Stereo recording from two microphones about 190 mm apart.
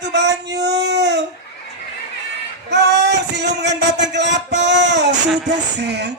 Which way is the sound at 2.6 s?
65° right (ahead or behind).